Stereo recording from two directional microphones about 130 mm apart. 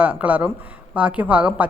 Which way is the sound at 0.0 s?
10° right (ahead or behind).